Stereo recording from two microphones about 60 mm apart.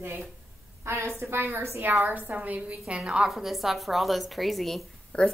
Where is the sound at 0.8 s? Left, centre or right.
Right; by 4.8 s centre.